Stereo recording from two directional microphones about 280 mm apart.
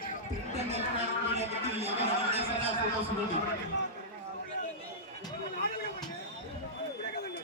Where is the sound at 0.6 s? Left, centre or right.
Right.